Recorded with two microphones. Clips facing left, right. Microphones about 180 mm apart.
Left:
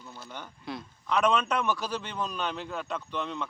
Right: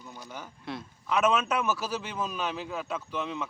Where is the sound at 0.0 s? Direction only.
15° right (ahead or behind).